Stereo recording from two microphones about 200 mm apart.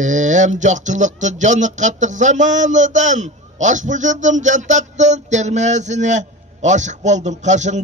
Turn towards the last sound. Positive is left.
turn(degrees=-35)  # may be behind; listen again after turning